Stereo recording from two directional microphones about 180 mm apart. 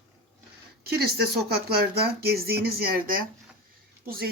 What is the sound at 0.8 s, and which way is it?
Speech, 60° right (ahead or behind).